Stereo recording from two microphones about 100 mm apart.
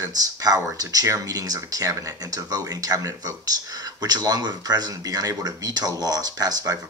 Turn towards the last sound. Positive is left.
turn(degrees=-40)  # may be behind; listen again after turning